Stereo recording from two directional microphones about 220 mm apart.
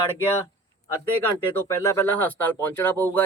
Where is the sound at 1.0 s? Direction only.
10° left (ahead or behind).